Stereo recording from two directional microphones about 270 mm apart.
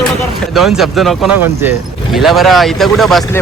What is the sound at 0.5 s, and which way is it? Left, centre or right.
Speech, centre.